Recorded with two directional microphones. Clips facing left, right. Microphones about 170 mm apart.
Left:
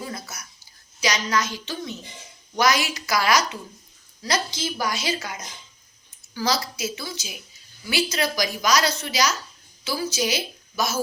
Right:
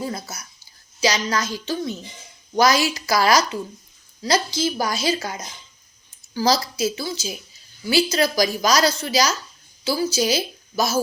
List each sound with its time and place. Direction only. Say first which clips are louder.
0.0 s a woman's voice: right 5 dB; 30° right (ahead or behind)